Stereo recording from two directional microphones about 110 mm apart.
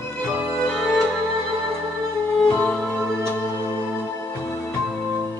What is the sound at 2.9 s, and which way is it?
Music, 20° right (ahead or behind).